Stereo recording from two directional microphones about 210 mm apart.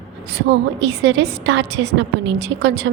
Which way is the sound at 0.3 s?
55° right (ahead or behind).